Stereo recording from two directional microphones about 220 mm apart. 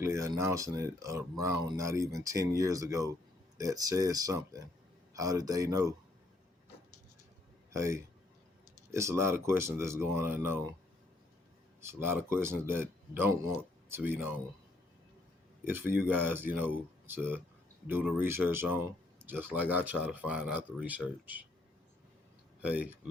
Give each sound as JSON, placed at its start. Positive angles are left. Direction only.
{"t": 0.0, "sound": "speech", "side_deg": -15}
{"t": 7.7, "sound": "speech", "side_deg": -15}
{"t": 11.8, "sound": "speech", "side_deg": -10}
{"t": 15.7, "sound": "speech", "side_deg": -10}
{"t": 22.6, "sound": "speech", "side_deg": -5}